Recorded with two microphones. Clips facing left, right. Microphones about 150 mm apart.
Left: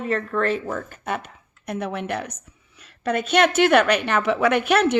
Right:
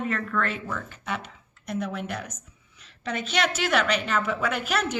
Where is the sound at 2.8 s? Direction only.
55° left (ahead or behind).